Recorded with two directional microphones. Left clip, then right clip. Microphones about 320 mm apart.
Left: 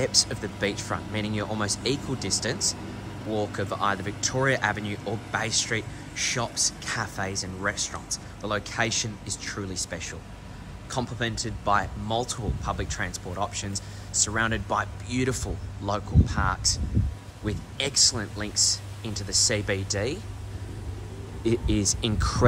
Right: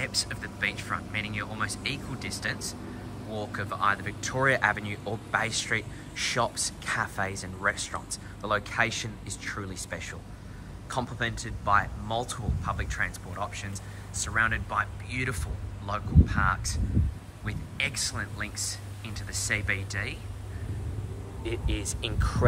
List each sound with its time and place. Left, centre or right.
0.0 s speech: centre
21.6 s speech: centre